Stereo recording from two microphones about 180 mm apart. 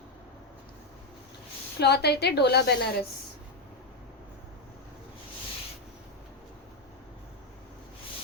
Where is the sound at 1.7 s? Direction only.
65° left (ahead or behind).